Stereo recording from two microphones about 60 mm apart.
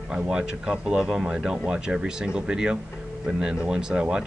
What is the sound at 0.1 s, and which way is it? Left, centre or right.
Speech, centre.